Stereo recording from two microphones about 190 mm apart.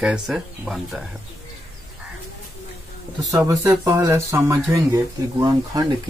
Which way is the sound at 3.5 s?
15° right (ahead or behind).